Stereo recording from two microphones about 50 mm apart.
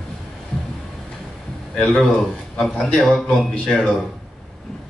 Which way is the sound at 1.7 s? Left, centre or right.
Centre.